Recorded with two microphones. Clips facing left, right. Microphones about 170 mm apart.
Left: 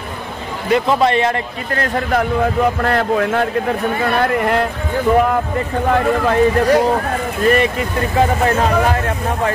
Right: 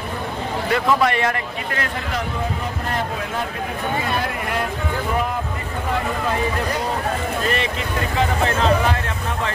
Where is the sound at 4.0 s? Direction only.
55° left (ahead or behind).